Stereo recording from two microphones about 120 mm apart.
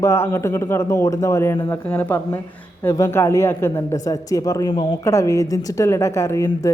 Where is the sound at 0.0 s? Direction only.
20° left (ahead or behind).